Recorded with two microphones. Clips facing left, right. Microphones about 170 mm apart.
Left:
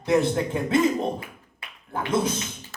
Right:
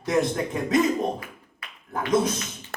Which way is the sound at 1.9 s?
30° left (ahead or behind).